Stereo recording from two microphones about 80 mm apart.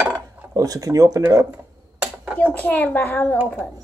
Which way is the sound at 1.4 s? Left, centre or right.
Right.